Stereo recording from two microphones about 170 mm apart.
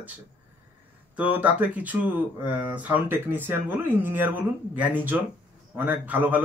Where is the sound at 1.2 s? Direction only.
10° right (ahead or behind).